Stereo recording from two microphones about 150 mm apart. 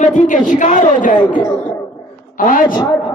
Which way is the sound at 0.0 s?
60° left (ahead or behind).